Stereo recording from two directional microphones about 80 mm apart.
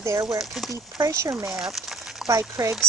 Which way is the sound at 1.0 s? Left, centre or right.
Right.